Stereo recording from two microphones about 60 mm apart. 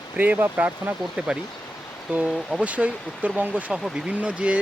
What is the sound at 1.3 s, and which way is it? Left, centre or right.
Speech, centre.